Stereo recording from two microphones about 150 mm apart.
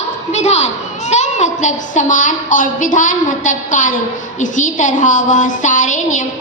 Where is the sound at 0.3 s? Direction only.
45° left (ahead or behind).